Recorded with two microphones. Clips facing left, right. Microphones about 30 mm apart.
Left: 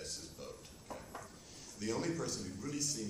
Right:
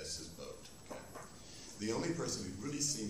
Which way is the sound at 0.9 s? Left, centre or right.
Left.